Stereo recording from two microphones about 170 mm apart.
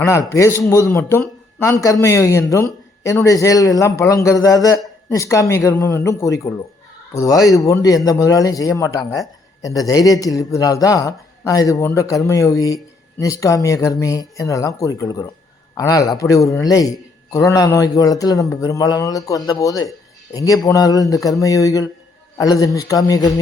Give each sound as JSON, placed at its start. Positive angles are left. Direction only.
{"t": 0.0, "sound": "speech", "side_deg": 15}